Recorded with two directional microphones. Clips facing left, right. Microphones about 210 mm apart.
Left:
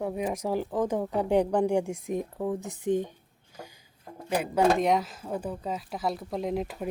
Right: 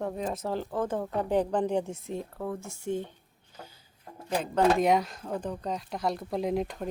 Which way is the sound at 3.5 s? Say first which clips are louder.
Left 3 dB; 15° left (ahead or behind).